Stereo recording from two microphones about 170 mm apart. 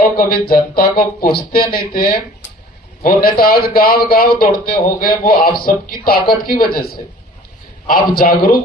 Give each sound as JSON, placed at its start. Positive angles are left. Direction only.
{"t": 0.2, "sound": "a man's voice", "side_deg": 60}
{"t": 8.1, "sound": "a man's voice", "side_deg": 60}